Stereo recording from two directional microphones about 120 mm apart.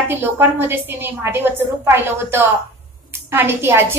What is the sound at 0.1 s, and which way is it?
A woman's voice, 20° right (ahead or behind).